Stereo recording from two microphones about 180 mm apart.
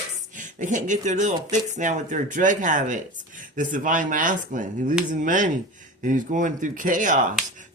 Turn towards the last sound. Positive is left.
turn(degrees=-45)  # may be behind; listen again after turning